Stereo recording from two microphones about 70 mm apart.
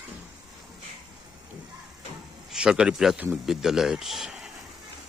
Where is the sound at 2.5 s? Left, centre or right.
Centre.